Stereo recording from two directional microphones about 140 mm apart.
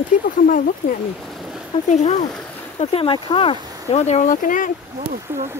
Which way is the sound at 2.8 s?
45° left (ahead or behind).